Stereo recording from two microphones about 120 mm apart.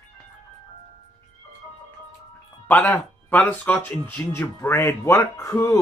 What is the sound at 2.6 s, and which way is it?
Speech, 15° left (ahead or behind).